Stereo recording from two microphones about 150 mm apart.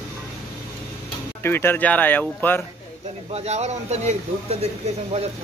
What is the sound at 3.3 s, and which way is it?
Speech, 45° right (ahead or behind).